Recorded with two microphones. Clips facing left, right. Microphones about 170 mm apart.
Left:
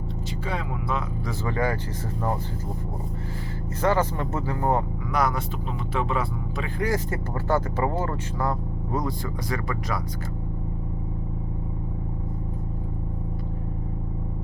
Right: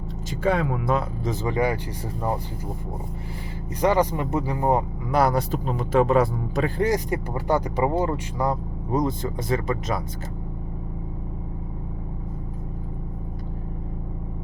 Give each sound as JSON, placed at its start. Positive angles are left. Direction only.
{"t": 0.4, "sound": "speech", "side_deg": -50}
{"t": 1.2, "sound": "speech", "side_deg": -20}
{"t": 3.8, "sound": "speech", "side_deg": -15}
{"t": 5.1, "sound": "speech", "side_deg": -35}
{"t": 6.8, "sound": "speech", "side_deg": -15}